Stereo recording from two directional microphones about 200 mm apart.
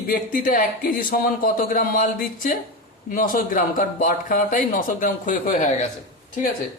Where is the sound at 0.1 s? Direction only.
45° left (ahead or behind).